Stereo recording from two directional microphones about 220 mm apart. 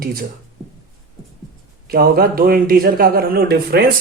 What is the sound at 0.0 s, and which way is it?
Speech, 40° right (ahead or behind).